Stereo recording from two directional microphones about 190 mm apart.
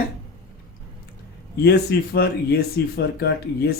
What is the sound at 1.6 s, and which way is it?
Speech, 60° left (ahead or behind).